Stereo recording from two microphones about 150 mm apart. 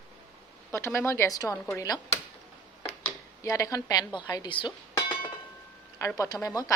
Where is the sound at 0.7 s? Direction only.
20° left (ahead or behind).